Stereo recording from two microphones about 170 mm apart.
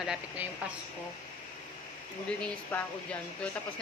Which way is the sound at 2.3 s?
5° left (ahead or behind).